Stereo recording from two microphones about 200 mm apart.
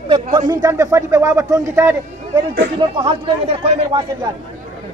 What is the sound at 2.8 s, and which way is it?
Speech, 25° right (ahead or behind).